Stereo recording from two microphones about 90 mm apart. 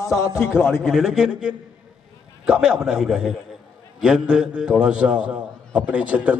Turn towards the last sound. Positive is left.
turn(degrees=-15)  # may be behind; listen again after turning